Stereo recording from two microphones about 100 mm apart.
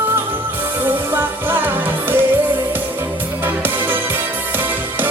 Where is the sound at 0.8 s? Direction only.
20° right (ahead or behind).